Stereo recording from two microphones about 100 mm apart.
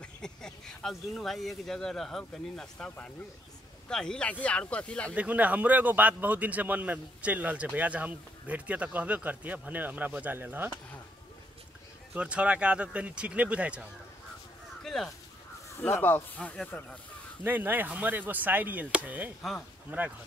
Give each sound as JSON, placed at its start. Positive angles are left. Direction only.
{"t": 0.0, "sound": "speech", "side_deg": 5}
{"t": 5.1, "sound": "a man's voice", "side_deg": -15}
{"t": 12.1, "sound": "a man's voice", "side_deg": -10}
{"t": 14.8, "sound": "a sound", "side_deg": 5}
{"t": 15.8, "sound": "speech", "side_deg": 15}
{"t": 17.4, "sound": "a man's voice", "side_deg": -20}